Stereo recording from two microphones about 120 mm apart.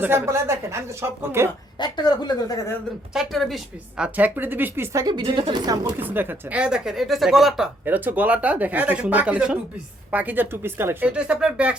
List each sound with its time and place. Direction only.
0.0 s a woman's voice: 20° right (ahead or behind)
1.8 s speech: 35° left (ahead or behind)
3.1 s a woman's voice: 5° right (ahead or behind); by 5.1 s 25° right (ahead or behind)
5.2 s a woman's voice: 50° right (ahead or behind)
5.6 s speech: 30° right (ahead or behind)
6.0 s a woman's voice: 15° right (ahead or behind)
7.9 s a woman's voice: 15° right (ahead or behind)
11.1 s a woman's voice: 10° right (ahead or behind)